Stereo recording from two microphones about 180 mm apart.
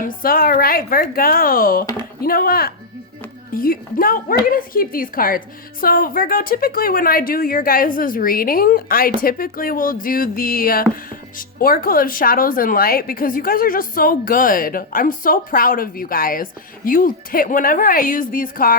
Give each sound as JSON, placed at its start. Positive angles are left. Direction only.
{"t": 0.0, "sound": "speech", "side_deg": 50}